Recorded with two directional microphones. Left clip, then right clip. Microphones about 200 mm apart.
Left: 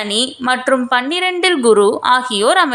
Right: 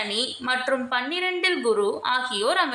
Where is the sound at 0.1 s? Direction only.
40° left (ahead or behind).